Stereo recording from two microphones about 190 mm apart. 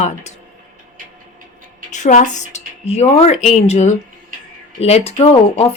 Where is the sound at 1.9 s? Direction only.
40° left (ahead or behind).